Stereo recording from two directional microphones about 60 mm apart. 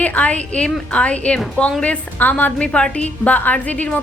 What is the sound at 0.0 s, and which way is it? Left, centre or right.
A woman's voice, left.